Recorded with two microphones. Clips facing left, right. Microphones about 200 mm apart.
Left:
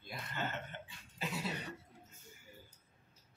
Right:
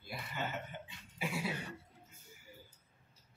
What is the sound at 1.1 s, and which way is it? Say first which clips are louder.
Cough: right 2 dB; 10° right (ahead or behind).